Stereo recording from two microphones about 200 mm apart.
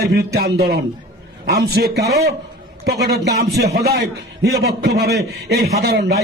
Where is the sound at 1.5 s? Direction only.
55° right (ahead or behind).